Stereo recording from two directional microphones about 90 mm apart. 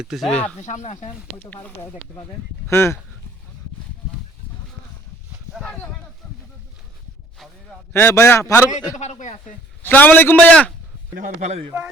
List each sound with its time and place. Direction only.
0.0 s speech: 5° right (ahead or behind)
0.3 s speech: 10° left (ahead or behind)
2.6 s a man's voice: 30° left (ahead or behind)
6.2 s a sound: 5° left (ahead or behind)
7.9 s a man's voice: 25° left (ahead or behind)
9.8 s a man's voice: 20° left (ahead or behind)